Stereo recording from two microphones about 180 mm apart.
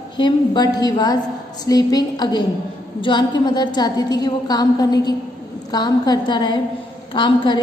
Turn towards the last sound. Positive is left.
turn(degrees=25)  # may be behind; listen again after turning